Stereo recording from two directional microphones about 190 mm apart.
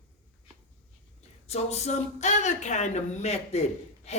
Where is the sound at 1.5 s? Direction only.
35° left (ahead or behind).